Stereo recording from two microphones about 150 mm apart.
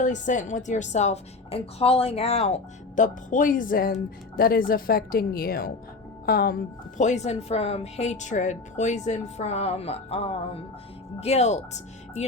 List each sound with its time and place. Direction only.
0.0 s a woman's voice: 55° left (ahead or behind); by 6.6 s 85° left
6.9 s a woman's voice: 50° left (ahead or behind)